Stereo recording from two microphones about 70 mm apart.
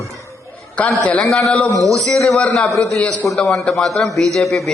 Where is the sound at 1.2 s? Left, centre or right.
Centre.